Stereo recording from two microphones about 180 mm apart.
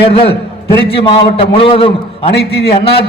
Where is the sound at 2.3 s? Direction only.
60° left (ahead or behind).